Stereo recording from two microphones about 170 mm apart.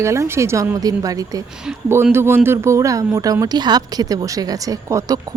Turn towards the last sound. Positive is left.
turn(degrees=-20)  # may be behind; listen again after turning